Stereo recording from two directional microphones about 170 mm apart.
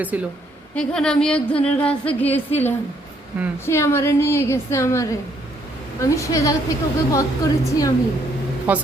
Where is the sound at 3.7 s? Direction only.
15° left (ahead or behind).